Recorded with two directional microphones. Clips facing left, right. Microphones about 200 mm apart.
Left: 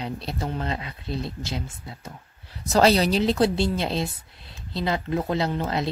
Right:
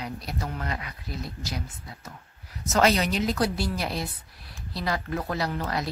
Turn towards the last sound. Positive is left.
turn(degrees=25)  # may be behind; listen again after turning